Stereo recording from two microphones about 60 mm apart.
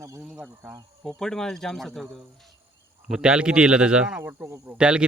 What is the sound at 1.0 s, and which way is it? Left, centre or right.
Speech, centre.